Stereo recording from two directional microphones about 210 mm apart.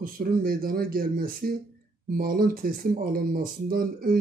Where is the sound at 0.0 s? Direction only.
45° right (ahead or behind).